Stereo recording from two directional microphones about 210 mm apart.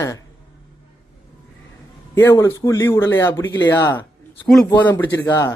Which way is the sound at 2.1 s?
15° left (ahead or behind).